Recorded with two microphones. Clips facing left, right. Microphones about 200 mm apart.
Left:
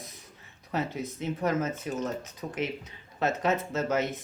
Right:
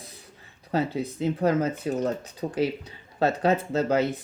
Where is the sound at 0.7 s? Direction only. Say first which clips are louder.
Right 5 dB; 30° right (ahead or behind).